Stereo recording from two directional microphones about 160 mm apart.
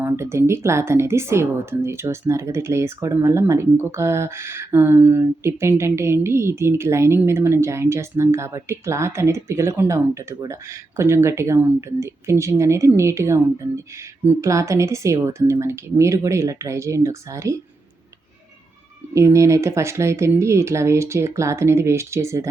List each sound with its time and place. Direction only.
0.0 s speech: 15° right (ahead or behind)
19.1 s speech: 20° right (ahead or behind)